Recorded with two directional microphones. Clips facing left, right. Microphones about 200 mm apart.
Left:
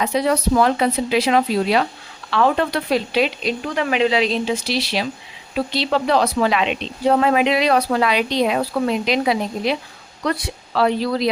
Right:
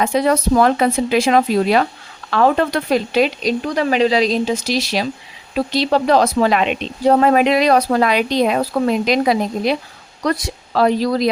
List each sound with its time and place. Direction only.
0.0 s speech: 50° right (ahead or behind)